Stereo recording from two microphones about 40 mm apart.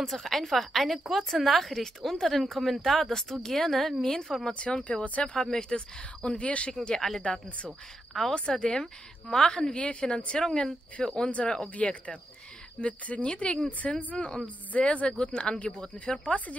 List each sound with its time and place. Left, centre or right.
0.0 s a woman's voice: centre
5.0 s speech: left
5.3 s a woman's voice: centre
6.2 s speech: left
6.7 s a woman's voice: centre
7.2 s a woman's voice: left
8.1 s speech: centre
8.5 s a woman's voice: left
14.1 s a woman's voice: centre